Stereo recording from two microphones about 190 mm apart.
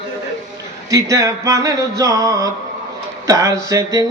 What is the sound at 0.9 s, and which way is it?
Music, 15° right (ahead or behind).